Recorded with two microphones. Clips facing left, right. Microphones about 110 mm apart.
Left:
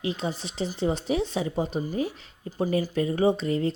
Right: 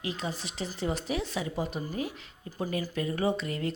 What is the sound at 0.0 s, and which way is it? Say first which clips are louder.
Speech: left 5 dB; 30° left (ahead or behind).